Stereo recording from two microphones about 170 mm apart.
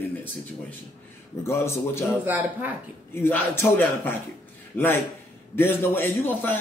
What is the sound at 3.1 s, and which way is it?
A man's voice, 15° left (ahead or behind).